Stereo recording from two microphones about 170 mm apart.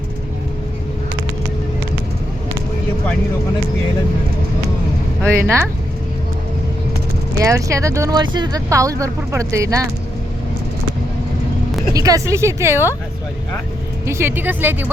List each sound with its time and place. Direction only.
5.3 s a woman's voice: 15° right (ahead or behind)
7.4 s speech: 20° right (ahead or behind)
11.9 s a woman's voice: 20° right (ahead or behind)
14.1 s a woman's voice: 15° right (ahead or behind)